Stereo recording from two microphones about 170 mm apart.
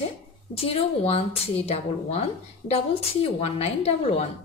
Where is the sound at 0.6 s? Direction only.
35° left (ahead or behind).